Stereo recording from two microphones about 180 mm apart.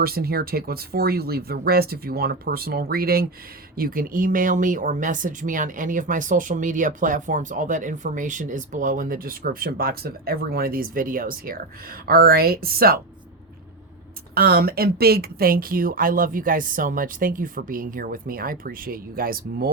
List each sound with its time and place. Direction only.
0.0 s speech: 60° right (ahead or behind)
14.3 s speech: 55° right (ahead or behind)